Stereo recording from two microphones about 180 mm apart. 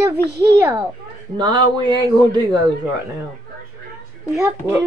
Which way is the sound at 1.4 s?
25° right (ahead or behind).